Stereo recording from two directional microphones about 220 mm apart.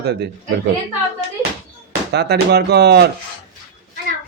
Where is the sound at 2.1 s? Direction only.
50° right (ahead or behind).